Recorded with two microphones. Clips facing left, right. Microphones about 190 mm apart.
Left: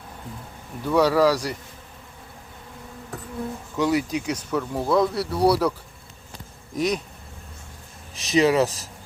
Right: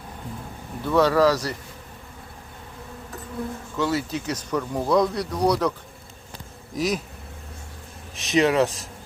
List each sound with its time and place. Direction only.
0.9 s speech: 10° left (ahead or behind)
3.8 s speech: 15° left (ahead or behind)
6.7 s speech: centre (ahead or behind)
8.1 s speech: centre (ahead or behind)